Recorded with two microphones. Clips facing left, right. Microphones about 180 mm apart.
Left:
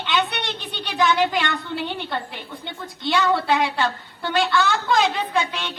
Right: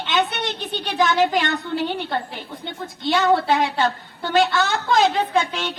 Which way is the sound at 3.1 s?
45° right (ahead or behind).